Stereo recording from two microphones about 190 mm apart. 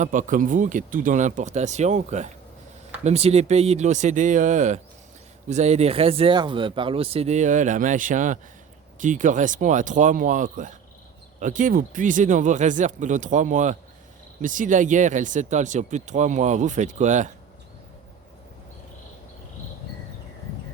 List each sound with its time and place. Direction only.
0.0 s speech: 45° right (ahead or behind)